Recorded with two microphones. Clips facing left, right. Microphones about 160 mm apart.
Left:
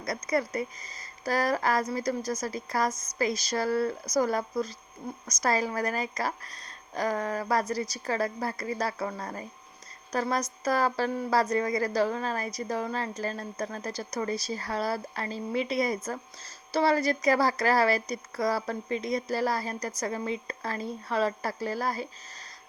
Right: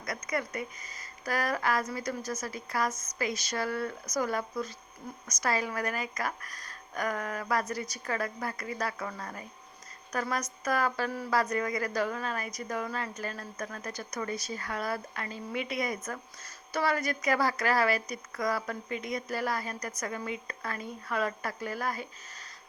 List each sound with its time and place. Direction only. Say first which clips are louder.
0.0 s a woman's voice: left 5 dB; 35° left (ahead or behind)